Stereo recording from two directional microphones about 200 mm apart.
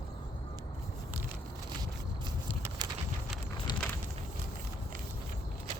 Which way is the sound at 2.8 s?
20° right (ahead or behind).